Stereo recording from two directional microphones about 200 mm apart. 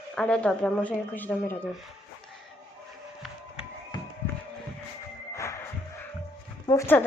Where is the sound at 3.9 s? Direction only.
20° left (ahead or behind).